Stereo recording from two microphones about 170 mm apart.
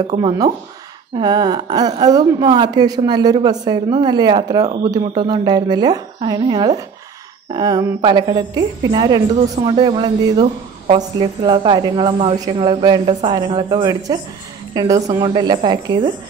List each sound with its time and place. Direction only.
1.1 s a woman's voice: 25° right (ahead or behind)